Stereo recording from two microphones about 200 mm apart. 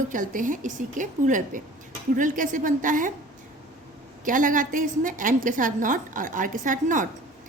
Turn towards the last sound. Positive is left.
turn(degrees=-40)  # may be behind; listen again after turning